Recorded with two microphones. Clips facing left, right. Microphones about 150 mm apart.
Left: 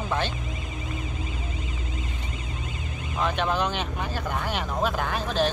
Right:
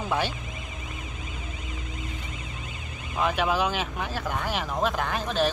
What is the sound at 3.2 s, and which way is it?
Speech, 5° right (ahead or behind).